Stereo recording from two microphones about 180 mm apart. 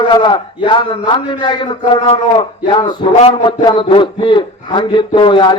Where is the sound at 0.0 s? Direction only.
25° left (ahead or behind).